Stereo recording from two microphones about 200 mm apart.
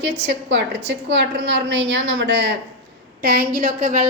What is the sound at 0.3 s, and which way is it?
A woman's voice, 60° right (ahead or behind).